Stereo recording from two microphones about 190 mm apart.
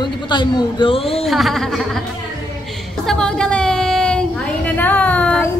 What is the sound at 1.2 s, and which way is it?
Speech, centre (ahead or behind).